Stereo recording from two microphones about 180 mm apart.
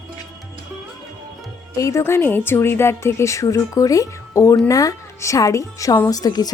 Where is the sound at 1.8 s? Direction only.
15° left (ahead or behind).